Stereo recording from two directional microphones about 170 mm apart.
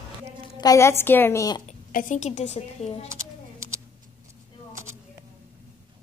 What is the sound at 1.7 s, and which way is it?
Speech, 50° left (ahead or behind).